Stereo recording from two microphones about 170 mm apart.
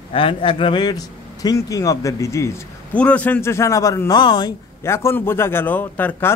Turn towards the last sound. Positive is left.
turn(degrees=10)  # may be behind; listen again after turning